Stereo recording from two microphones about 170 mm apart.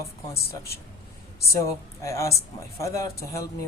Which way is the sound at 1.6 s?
15° left (ahead or behind).